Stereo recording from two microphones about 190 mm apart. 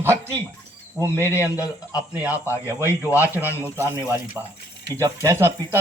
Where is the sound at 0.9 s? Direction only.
15° left (ahead or behind).